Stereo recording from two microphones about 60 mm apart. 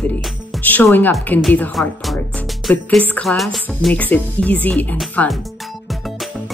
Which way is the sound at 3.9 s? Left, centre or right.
Left.